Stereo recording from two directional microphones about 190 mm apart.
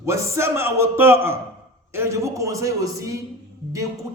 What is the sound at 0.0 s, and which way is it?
A man's voice, 15° right (ahead or behind).